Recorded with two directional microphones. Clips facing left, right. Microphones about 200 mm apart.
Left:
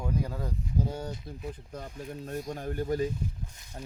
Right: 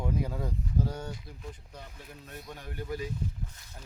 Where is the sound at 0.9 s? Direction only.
30° left (ahead or behind).